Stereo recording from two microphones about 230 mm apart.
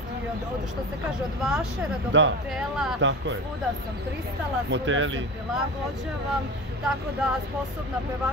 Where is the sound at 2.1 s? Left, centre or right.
Right.